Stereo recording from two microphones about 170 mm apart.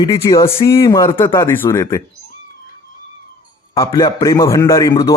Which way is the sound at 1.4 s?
15° left (ahead or behind).